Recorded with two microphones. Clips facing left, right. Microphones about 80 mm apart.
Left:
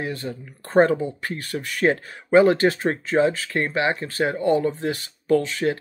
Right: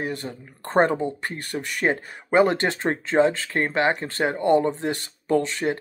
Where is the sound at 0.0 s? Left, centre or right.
Right.